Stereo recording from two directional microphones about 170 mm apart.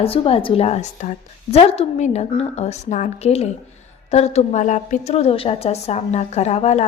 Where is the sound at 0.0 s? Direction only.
35° left (ahead or behind).